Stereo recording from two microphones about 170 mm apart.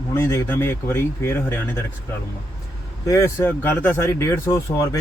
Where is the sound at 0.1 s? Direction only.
15° left (ahead or behind).